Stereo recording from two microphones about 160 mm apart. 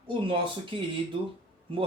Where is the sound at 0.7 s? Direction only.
35° right (ahead or behind).